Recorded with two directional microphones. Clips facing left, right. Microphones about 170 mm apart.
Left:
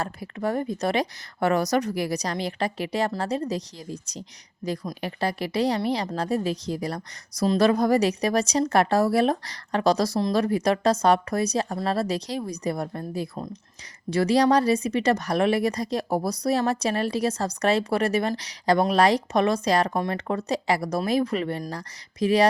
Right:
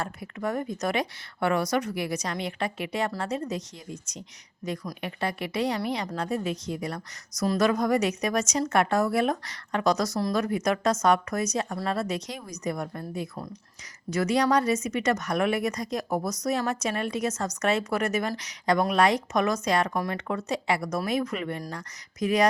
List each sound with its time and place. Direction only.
0.0 s speech: 35° left (ahead or behind)
13.3 s speech: 20° left (ahead or behind)